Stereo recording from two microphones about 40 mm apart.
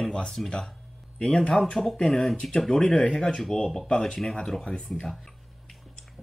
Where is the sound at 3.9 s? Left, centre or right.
Centre.